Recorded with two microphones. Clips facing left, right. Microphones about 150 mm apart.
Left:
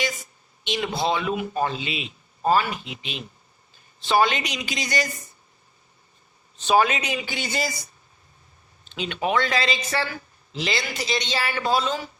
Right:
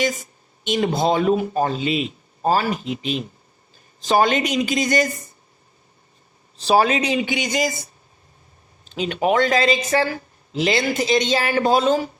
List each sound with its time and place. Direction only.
0.0 s speech: 45° right (ahead or behind)
6.6 s a man's voice: 35° right (ahead or behind)
8.8 s speech: 40° right (ahead or behind)